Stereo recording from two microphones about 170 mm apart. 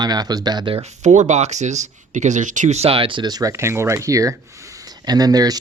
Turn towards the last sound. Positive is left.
turn(degrees=-20)  # may be behind; listen again after turning